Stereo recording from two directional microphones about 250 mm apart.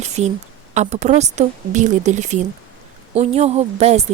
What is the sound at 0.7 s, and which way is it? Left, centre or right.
Speech, right.